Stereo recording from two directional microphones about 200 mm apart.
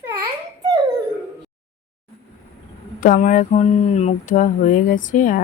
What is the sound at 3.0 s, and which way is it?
Speech, 40° left (ahead or behind).